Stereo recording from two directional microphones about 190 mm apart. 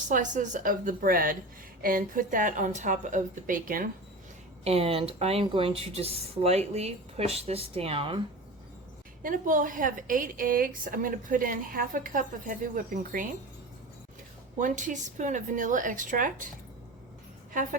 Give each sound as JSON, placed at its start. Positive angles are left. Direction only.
{"t": 0.1, "sound": "a woman's voice", "side_deg": -40}
{"t": 4.6, "sound": "speech", "side_deg": -30}
{"t": 9.2, "sound": "a woman's voice", "side_deg": -45}
{"t": 14.6, "sound": "a woman's voice", "side_deg": -40}
{"t": 17.5, "sound": "speech", "side_deg": -45}